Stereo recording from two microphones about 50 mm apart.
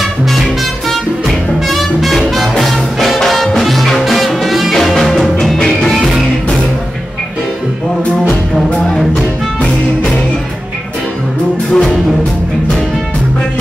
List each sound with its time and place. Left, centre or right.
0.0 s music: centre
11.7 s music: centre